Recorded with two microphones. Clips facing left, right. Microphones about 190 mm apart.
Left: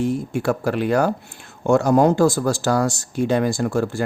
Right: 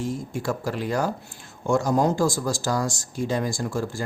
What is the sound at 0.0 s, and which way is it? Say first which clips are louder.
Speech: left 7 dB; 65° left (ahead or behind).